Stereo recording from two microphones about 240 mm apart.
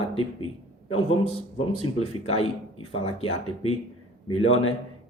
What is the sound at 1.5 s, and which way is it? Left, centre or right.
A man's voice, left.